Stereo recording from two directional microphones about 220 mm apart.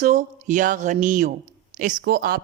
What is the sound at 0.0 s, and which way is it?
Speech, 35° right (ahead or behind).